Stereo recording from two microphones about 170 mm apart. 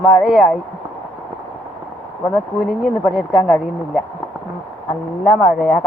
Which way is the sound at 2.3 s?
Centre (ahead or behind).